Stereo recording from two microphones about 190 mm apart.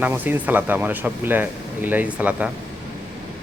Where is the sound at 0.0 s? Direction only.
10° right (ahead or behind).